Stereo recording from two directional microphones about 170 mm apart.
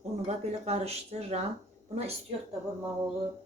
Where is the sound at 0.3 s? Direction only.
40° right (ahead or behind).